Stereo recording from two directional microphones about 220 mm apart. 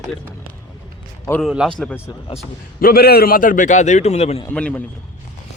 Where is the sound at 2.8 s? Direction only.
45° left (ahead or behind).